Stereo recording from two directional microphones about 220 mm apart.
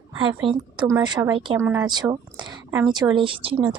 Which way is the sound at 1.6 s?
10° right (ahead or behind).